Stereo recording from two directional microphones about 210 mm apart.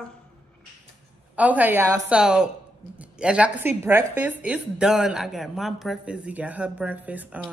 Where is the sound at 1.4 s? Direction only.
5° right (ahead or behind).